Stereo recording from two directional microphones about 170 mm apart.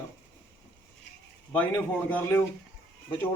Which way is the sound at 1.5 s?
10° left (ahead or behind).